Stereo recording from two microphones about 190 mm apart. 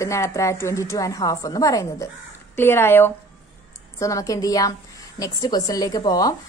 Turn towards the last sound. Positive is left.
turn(degrees=20)  # may be behind; listen again after turning